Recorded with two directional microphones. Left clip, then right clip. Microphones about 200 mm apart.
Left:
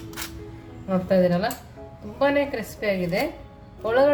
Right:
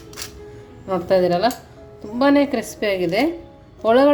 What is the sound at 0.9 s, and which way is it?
A woman's voice, 40° right (ahead or behind).